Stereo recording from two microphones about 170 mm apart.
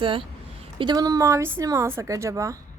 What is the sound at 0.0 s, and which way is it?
A woman's voice, 30° right (ahead or behind).